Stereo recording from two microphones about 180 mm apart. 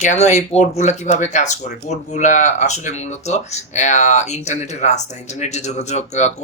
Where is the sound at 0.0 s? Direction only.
40° left (ahead or behind).